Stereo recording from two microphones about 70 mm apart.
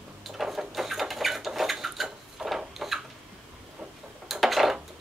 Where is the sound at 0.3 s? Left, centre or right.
Centre.